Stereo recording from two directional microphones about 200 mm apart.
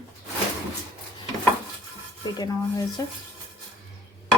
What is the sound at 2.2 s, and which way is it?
Rub, 20° left (ahead or behind).